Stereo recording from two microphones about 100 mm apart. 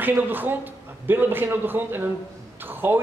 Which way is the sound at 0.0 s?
20° right (ahead or behind).